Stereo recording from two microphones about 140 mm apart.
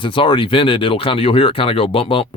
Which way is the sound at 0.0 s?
35° left (ahead or behind).